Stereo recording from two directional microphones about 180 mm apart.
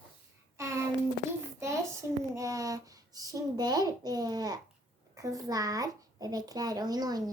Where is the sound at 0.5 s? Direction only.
15° right (ahead or behind).